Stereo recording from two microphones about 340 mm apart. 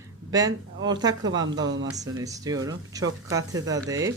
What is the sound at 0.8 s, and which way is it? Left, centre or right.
Speech, centre.